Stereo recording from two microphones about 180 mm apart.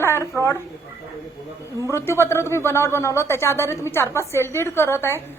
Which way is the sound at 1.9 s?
15° left (ahead or behind).